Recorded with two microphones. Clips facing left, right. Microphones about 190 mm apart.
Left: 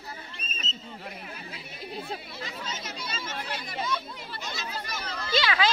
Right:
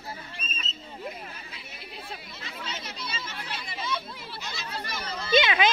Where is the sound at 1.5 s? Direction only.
40° left (ahead or behind).